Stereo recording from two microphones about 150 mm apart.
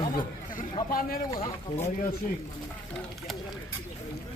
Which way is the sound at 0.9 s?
75° left (ahead or behind).